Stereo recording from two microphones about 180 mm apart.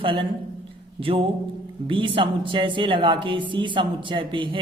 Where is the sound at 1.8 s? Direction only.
30° right (ahead or behind).